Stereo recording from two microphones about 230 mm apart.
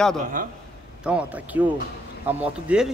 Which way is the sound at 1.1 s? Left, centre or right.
Centre.